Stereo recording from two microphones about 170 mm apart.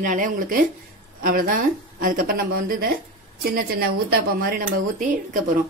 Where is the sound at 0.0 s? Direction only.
50° right (ahead or behind).